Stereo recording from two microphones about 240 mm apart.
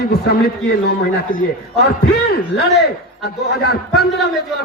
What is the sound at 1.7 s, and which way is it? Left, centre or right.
A man's voice, left.